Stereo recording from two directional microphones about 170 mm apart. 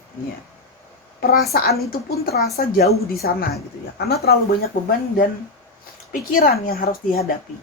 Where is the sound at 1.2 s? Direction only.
60° left (ahead or behind).